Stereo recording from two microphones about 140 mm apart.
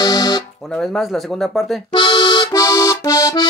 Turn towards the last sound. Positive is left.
turn(degrees=25)  # may be behind; listen again after turning